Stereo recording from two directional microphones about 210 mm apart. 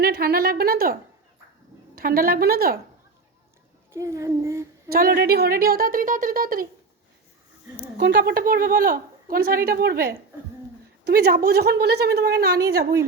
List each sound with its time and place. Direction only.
0.0 s a woman's voice: 50° right (ahead or behind)
2.0 s a woman's voice: 45° right (ahead or behind)
3.9 s speech: 15° right (ahead or behind)
4.9 s a woman's voice: 45° right (ahead or behind)
7.9 s a woman's voice: 55° right (ahead or behind)